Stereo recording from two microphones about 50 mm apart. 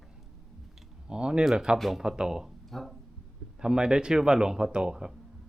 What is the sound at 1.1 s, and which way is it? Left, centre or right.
Speech, centre.